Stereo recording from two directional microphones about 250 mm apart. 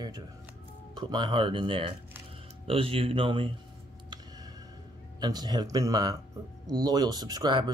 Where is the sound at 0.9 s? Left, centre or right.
Centre.